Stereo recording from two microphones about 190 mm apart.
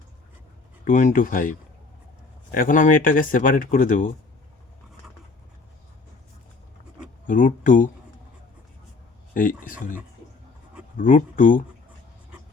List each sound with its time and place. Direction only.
0.9 s speech: 45° left (ahead or behind)
7.3 s speech: 45° left (ahead or behind)
9.3 s speech: 45° left (ahead or behind)
10.9 s speech: 45° left (ahead or behind)